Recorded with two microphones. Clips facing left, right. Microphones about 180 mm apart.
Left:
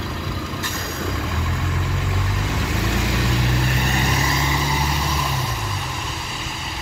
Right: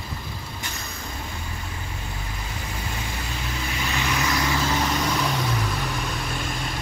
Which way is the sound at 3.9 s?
45° left (ahead or behind).